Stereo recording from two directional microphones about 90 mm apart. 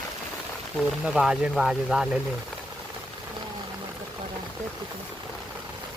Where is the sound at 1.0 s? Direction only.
5° right (ahead or behind).